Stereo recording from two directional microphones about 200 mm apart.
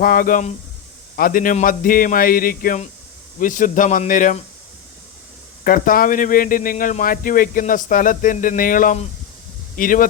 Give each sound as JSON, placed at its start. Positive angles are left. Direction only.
{"t": 0.0, "sound": "speech", "side_deg": 45}
{"t": 5.6, "sound": "speech", "side_deg": 45}